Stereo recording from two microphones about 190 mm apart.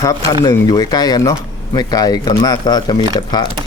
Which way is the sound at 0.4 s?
20° left (ahead or behind).